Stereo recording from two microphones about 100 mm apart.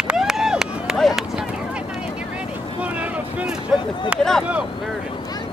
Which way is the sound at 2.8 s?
15° right (ahead or behind).